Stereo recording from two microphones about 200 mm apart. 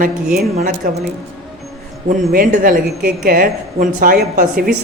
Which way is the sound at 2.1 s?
40° right (ahead or behind).